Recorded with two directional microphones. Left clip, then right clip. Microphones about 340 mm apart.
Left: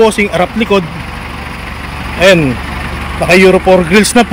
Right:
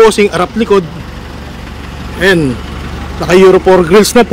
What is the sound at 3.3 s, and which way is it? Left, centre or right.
Speech, centre.